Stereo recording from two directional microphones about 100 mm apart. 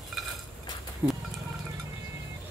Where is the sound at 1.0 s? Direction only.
20° right (ahead or behind).